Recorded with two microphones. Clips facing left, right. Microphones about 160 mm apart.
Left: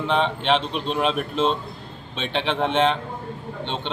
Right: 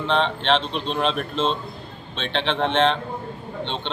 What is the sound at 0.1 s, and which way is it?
Speech, 10° left (ahead or behind).